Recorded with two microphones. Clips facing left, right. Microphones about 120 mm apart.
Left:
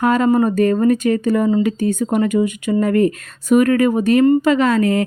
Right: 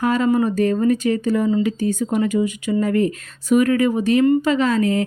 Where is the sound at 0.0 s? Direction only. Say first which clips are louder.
Left 3 dB; 55° left (ahead or behind).